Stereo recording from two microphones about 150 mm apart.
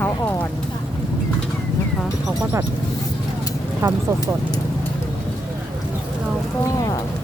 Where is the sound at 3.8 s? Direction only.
20° right (ahead or behind).